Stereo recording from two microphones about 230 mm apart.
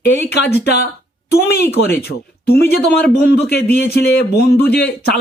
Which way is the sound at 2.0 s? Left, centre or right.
Left.